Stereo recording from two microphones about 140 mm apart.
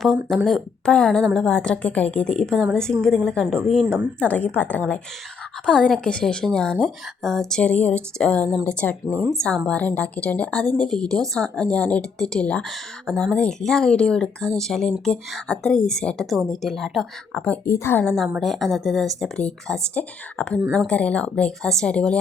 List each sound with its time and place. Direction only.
0.4 s speech: 5° left (ahead or behind)
17.7 s speech: 20° left (ahead or behind)
18.0 s speech: 5° left (ahead or behind)